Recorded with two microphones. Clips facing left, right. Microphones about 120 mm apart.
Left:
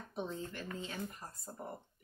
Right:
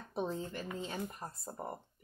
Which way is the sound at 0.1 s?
35° right (ahead or behind).